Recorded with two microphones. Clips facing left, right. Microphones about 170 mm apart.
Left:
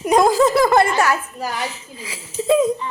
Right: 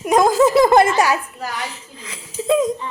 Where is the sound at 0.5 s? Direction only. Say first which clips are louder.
Right 2 dB; 20° right (ahead or behind).